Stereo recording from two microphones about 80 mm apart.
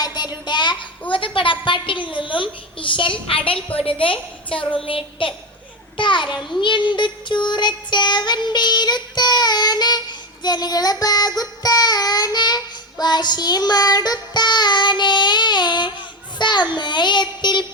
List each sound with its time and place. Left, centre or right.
0.0 s child singing: left
1.1 s a sound: left
3.8 s a woman's voice: left
6.6 s music: left
16.4 s child singing: left